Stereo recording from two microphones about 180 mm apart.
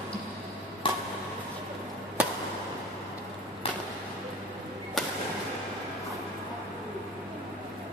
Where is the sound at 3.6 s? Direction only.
30° left (ahead or behind).